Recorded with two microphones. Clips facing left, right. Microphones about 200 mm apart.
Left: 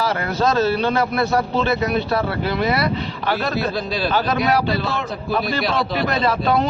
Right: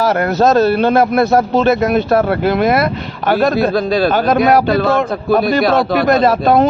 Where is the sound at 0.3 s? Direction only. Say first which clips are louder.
Right 6 dB; 45° right (ahead or behind).